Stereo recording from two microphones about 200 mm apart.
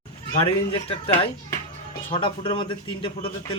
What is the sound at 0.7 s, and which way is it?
A man's voice, 30° left (ahead or behind).